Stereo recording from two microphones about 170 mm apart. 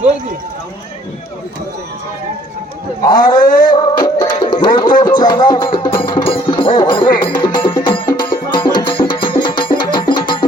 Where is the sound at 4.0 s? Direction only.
25° left (ahead or behind).